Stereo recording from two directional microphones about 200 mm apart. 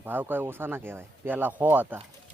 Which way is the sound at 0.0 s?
10° right (ahead or behind).